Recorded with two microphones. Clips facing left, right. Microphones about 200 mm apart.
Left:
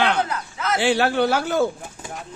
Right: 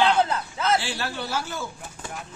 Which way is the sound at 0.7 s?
65° left (ahead or behind).